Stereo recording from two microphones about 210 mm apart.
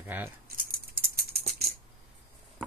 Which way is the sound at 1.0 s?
50° right (ahead or behind).